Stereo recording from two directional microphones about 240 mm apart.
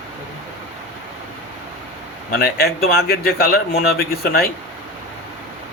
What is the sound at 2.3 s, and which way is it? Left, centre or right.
Speech, left.